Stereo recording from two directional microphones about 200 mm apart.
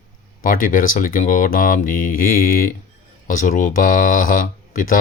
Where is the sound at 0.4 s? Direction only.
45° left (ahead or behind).